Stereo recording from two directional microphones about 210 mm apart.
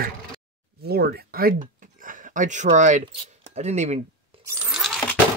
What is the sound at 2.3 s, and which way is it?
A man's voice, 35° right (ahead or behind).